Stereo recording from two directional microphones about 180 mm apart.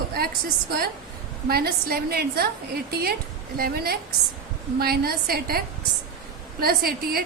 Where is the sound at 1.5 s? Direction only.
55° right (ahead or behind).